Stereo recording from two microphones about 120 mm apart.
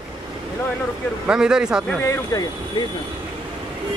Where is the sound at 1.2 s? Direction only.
5° right (ahead or behind).